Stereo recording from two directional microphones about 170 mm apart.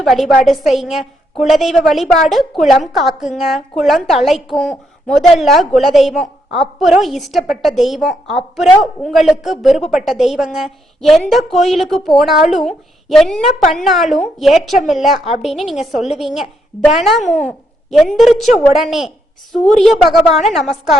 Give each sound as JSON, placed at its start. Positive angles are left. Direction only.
{"t": 0.0, "sound": "a woman's voice", "side_deg": 0}